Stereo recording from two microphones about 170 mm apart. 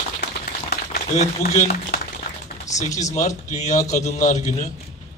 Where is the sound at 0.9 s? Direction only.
45° left (ahead or behind).